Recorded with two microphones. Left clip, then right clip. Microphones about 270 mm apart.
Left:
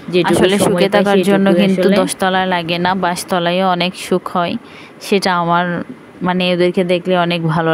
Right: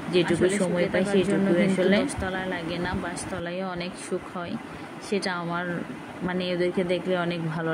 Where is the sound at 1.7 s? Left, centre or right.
Left.